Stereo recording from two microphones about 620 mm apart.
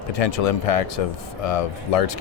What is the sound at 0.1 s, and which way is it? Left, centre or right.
Speech, left.